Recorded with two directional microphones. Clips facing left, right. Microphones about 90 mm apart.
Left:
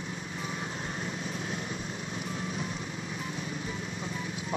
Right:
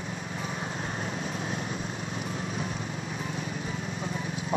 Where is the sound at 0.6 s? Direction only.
35° right (ahead or behind).